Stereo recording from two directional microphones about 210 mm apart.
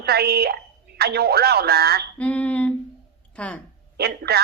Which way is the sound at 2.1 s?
5° left (ahead or behind).